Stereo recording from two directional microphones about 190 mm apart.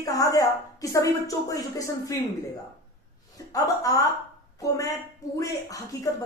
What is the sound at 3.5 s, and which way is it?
A woman's voice, 20° left (ahead or behind).